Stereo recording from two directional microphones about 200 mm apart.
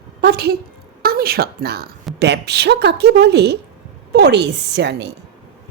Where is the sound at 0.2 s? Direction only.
50° right (ahead or behind).